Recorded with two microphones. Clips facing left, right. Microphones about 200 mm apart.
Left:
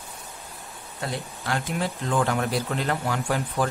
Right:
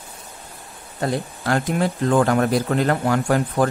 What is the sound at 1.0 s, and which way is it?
Speech, 50° right (ahead or behind).